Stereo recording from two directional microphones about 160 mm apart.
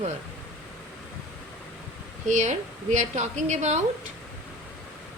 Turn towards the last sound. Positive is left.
turn(degrees=-45)  # may be behind; listen again after turning